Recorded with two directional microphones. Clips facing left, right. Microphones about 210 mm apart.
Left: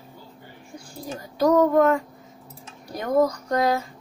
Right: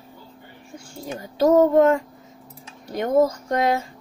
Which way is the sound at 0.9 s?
25° right (ahead or behind).